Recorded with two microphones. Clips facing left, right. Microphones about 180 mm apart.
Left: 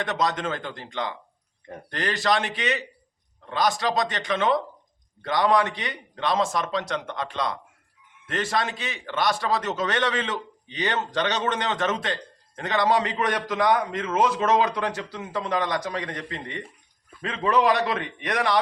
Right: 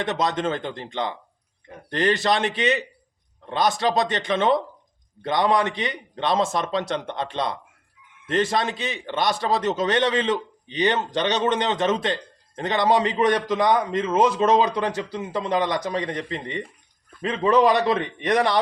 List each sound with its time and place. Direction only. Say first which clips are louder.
0.0 s a man's voice: right 2 dB; 25° right (ahead or behind)